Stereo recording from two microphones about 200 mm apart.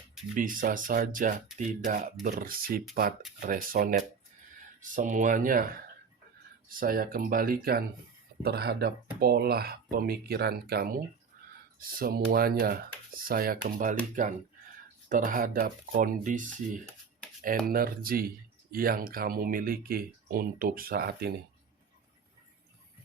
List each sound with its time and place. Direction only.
0.3 s speech: 45° right (ahead or behind)